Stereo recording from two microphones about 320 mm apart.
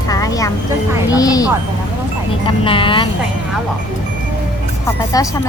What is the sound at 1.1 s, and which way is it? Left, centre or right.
Speech, centre.